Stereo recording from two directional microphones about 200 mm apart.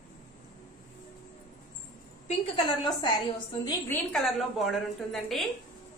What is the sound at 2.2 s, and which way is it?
Speech, 25° left (ahead or behind).